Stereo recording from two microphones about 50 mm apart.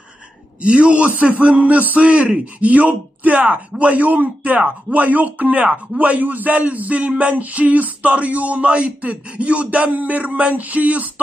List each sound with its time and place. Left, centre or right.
0.6 s a man's voice: right